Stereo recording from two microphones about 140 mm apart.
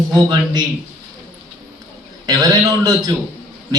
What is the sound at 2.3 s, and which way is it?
Speech, 25° right (ahead or behind).